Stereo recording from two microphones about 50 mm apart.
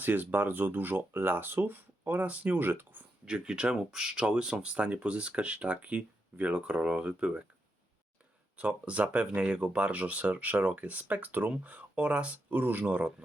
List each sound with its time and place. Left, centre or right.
0.0 s speech: right
2.2 s speech: right
2.6 s speech: right
3.2 s speech: centre
8.5 s speech: right
12.5 s speech: right
12.8 s speech: right